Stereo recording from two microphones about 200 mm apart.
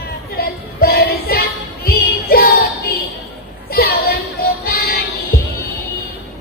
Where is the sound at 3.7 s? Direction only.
50° left (ahead or behind).